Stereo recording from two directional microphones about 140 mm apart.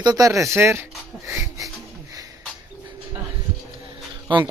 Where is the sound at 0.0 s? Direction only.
25° right (ahead or behind).